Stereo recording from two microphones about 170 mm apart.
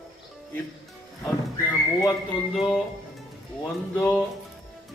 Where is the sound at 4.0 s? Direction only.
10° left (ahead or behind).